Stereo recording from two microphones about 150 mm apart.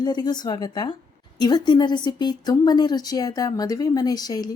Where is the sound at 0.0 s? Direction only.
30° left (ahead or behind).